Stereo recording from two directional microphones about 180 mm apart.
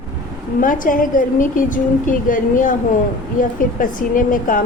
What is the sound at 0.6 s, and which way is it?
A woman's voice, 50° left (ahead or behind).